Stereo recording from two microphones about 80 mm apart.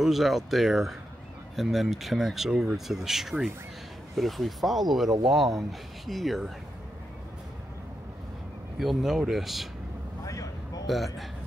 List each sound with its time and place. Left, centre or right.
0.0 s speech: centre
8.7 s speech: centre
10.2 s a sound: left